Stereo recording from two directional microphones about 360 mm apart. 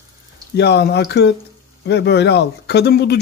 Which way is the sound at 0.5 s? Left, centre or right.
Left.